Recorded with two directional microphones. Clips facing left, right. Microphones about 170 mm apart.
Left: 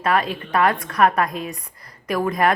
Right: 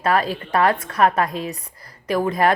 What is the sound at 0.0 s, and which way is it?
A woman's voice, 35° right (ahead or behind).